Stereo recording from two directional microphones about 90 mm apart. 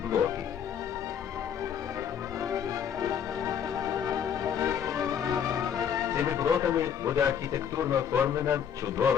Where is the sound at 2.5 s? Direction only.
40° right (ahead or behind).